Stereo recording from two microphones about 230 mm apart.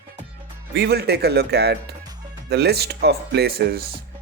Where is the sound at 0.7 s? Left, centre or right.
Right.